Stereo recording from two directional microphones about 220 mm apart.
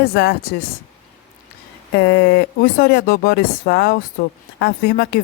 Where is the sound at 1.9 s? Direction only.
50° left (ahead or behind).